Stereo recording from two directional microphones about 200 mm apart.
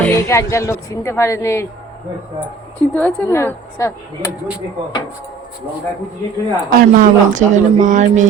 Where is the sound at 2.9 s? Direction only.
10° left (ahead or behind).